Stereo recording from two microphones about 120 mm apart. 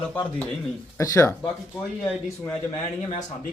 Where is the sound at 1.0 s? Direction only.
25° left (ahead or behind).